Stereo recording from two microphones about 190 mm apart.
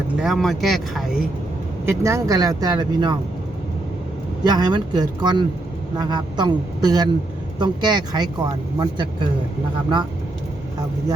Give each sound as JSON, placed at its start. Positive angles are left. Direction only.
{"t": 0.2, "sound": "speech", "side_deg": 0}
{"t": 1.8, "sound": "speech", "side_deg": -15}
{"t": 4.4, "sound": "speech", "side_deg": -20}